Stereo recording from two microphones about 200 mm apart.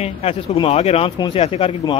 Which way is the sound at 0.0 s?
30° left (ahead or behind).